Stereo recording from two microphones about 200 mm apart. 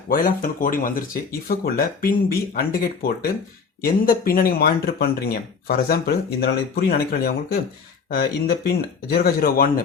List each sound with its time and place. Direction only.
0.1 s speech: 45° left (ahead or behind)